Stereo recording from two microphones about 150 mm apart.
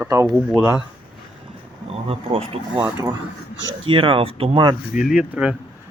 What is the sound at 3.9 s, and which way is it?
Speech, 35° right (ahead or behind).